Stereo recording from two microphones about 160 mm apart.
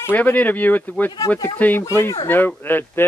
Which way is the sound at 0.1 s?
10° left (ahead or behind).